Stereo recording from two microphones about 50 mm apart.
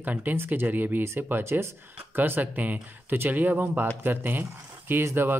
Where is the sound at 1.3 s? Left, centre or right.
Right.